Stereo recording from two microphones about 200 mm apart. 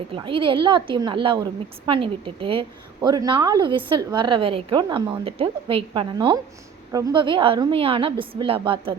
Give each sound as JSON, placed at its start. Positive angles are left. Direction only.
{"t": 0.1, "sound": "a woman's voice", "side_deg": -25}